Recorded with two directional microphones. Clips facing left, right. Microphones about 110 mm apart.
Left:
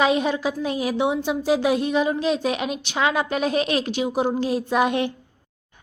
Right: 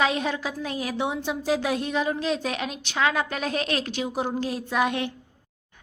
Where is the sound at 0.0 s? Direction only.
10° left (ahead or behind).